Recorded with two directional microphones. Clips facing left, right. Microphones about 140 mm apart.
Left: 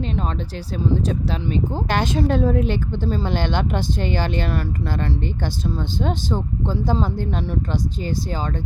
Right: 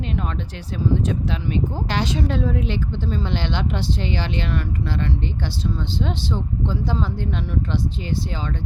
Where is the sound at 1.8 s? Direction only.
50° left (ahead or behind).